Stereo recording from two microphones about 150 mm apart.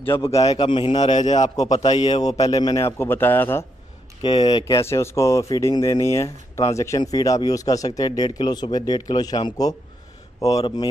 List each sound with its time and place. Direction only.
0.2 s speech: 20° left (ahead or behind)
0.6 s a man's voice: 35° left (ahead or behind)
1.0 s a man's voice: 50° left (ahead or behind)
2.5 s a man's voice: 25° left (ahead or behind)
4.2 s speech: 30° left (ahead or behind)